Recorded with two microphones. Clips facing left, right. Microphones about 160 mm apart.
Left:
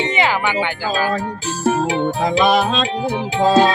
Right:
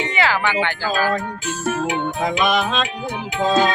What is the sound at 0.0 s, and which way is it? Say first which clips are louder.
Speech: left 2 dB; 20° left (ahead or behind).